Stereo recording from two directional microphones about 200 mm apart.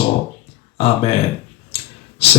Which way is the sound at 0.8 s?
30° left (ahead or behind).